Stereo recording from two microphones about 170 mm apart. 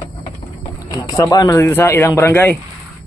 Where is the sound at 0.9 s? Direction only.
20° left (ahead or behind).